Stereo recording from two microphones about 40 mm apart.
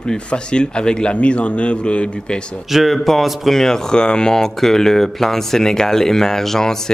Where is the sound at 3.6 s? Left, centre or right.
Centre.